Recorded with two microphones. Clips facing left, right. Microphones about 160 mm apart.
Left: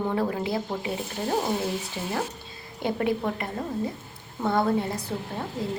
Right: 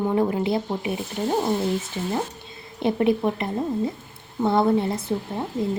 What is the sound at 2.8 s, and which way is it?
A woman's voice, 25° right (ahead or behind).